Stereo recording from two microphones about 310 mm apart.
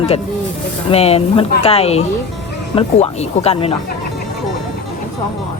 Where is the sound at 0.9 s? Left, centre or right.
Centre.